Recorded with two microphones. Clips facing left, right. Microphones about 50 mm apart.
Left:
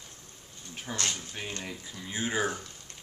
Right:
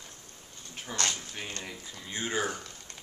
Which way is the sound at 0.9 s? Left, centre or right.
Centre.